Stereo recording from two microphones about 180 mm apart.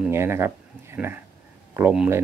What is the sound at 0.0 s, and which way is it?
Speech, 15° right (ahead or behind).